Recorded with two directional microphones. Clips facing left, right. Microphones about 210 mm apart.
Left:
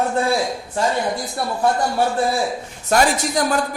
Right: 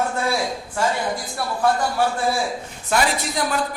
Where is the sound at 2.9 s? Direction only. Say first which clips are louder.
Left 4 dB; 40° left (ahead or behind).